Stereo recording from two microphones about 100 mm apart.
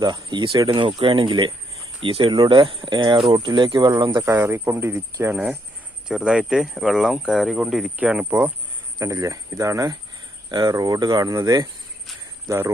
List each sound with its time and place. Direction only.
0.0 s speech: 50° right (ahead or behind); by 2.3 s 65° right (ahead or behind)
2.3 s speech: 50° right (ahead or behind)
4.2 s speech: 25° right (ahead or behind)
9.0 s speech: 35° right (ahead or behind)
12.5 s speech: 30° right (ahead or behind)